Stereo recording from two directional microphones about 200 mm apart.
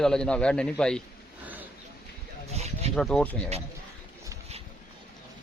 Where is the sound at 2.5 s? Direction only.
30° right (ahead or behind).